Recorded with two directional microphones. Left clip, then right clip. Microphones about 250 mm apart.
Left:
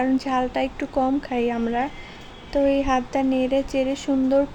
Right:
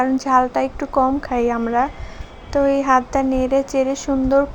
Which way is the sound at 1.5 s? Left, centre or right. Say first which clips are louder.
Right 6 dB; centre.